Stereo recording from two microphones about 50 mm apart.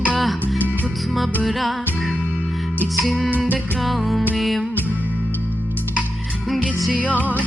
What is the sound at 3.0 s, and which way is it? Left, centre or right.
Music, centre.